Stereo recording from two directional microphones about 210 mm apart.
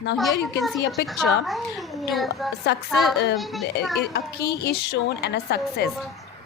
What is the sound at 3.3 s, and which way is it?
Speech, centre (ahead or behind).